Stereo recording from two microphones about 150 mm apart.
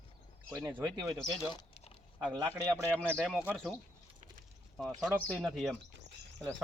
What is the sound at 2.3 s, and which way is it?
Speech, 20° right (ahead or behind).